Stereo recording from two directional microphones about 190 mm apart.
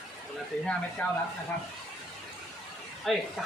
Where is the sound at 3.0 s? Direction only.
Centre (ahead or behind).